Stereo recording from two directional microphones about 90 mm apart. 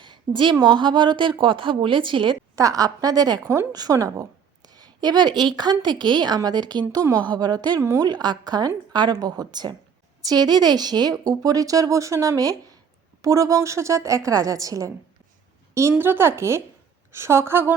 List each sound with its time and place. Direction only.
0.0 s a sound: 60° right (ahead or behind)
0.6 s a woman's voice: 60° right (ahead or behind)
2.6 s a woman's voice: 40° right (ahead or behind)
7.2 s a woman's voice: 55° right (ahead or behind)
7.8 s a woman's voice: 30° right (ahead or behind)
8.0 s a woman's voice: 55° right (ahead or behind); by 17.7 s 25° right (ahead or behind)